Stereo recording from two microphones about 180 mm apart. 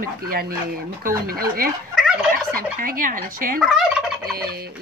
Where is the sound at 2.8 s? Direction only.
50° right (ahead or behind).